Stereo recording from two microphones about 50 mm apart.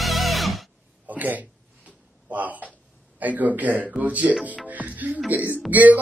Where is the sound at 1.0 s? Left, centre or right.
Right.